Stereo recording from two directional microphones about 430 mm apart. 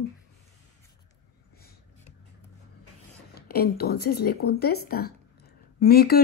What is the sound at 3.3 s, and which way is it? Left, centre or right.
Speech, left.